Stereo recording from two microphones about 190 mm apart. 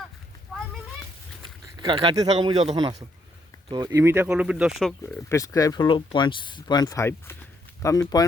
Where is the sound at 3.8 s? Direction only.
10° right (ahead or behind).